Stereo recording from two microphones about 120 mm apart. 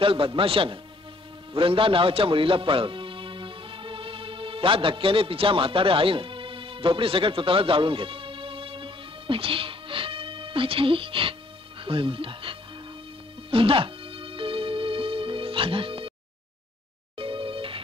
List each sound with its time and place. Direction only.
0.0 s speech: 50° right (ahead or behind)
1.5 s music: 45° right (ahead or behind)
11.8 s speech: 45° right (ahead or behind)
13.5 s music: 50° right (ahead or behind)
17.2 s music: 45° right (ahead or behind)